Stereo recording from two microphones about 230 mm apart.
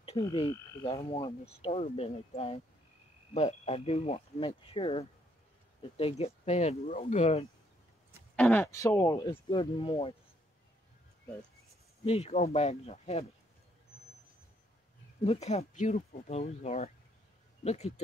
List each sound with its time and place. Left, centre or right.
0.2 s frog: left
8.4 s speech: centre; by 10.1 s left
12.0 s frog: left
15.4 s frog: left